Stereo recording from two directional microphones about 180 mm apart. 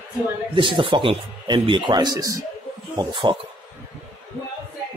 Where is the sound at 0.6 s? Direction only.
30° right (ahead or behind).